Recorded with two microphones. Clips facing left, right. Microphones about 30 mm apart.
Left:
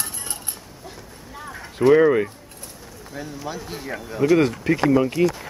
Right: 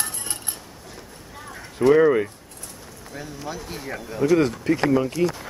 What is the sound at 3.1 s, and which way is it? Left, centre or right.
Speech, centre.